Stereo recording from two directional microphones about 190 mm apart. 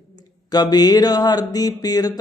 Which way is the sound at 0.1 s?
20° left (ahead or behind).